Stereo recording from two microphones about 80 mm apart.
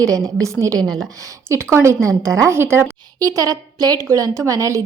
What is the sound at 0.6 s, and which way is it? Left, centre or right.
Speech, right.